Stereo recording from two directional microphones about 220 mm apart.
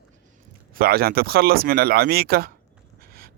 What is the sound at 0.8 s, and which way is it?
A man's voice, 45° right (ahead or behind).